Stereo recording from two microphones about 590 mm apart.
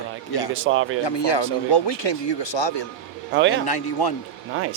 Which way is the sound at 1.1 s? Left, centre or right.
Left.